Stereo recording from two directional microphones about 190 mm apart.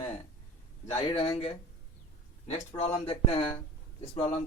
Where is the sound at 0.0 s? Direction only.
30° left (ahead or behind).